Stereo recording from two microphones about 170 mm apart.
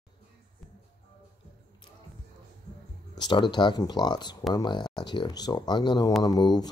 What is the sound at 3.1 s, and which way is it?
Speech, 25° left (ahead or behind).